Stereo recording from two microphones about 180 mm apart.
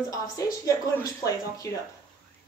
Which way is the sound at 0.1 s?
20° left (ahead or behind).